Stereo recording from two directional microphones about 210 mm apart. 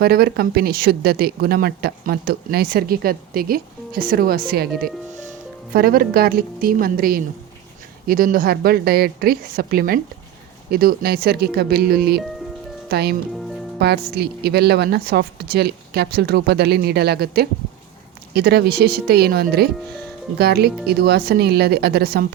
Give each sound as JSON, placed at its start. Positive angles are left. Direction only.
{"t": 0.0, "sound": "speech", "side_deg": -45}
{"t": 5.7, "sound": "speech", "side_deg": -45}